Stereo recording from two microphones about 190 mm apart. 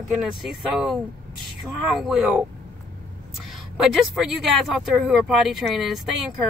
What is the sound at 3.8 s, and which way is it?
Speech, centre (ahead or behind).